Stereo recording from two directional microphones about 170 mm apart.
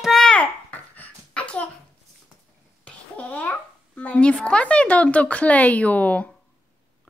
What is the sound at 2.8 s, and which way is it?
Babbling, 10° left (ahead or behind).